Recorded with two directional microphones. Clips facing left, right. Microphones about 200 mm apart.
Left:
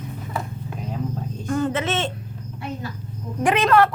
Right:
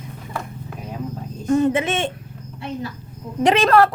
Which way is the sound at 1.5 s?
20° right (ahead or behind).